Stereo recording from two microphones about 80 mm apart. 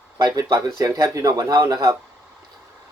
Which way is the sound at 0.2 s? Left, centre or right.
Right.